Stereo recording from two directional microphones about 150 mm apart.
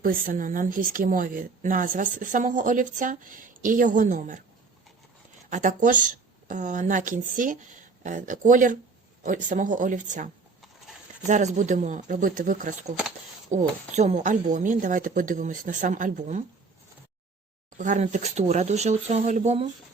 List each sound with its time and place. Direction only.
0.0 s speech: 70° right (ahead or behind)
5.5 s speech: 55° right (ahead or behind)
11.3 s speech: 50° right (ahead or behind)
13.5 s speech: 50° right (ahead or behind)
17.7 s speech: 55° right (ahead or behind)